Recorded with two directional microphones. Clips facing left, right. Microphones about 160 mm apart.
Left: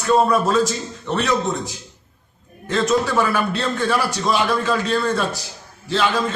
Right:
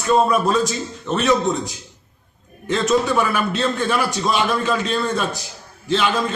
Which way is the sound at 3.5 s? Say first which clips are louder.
Right 1 dB; 20° right (ahead or behind).